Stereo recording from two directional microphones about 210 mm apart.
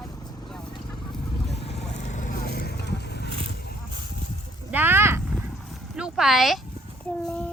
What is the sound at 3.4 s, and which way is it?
Horse, 50° left (ahead or behind).